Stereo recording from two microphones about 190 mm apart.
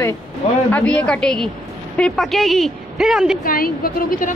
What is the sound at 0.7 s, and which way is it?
A woman's voice, 5° left (ahead or behind).